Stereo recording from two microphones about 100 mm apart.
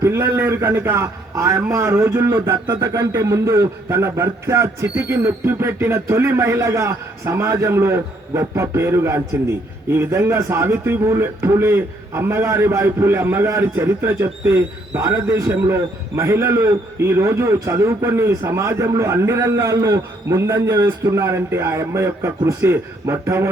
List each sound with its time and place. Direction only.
0.0 s a man's voice: 25° right (ahead or behind)